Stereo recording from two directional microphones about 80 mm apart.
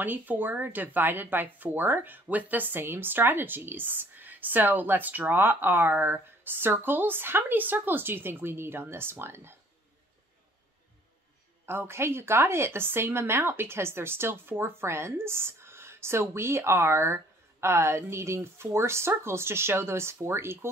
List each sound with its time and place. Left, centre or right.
0.0 s speech: right
11.6 s a woman's voice: right